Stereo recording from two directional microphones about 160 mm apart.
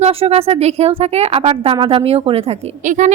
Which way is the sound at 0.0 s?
40° right (ahead or behind).